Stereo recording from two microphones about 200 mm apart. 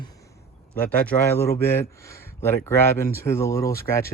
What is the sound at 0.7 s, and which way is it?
Speech, 10° left (ahead or behind).